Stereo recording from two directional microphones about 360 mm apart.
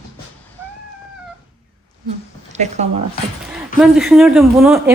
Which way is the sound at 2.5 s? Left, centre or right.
Centre.